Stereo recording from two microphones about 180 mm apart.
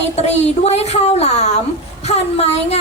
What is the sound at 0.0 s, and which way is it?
A woman's voice, 35° left (ahead or behind).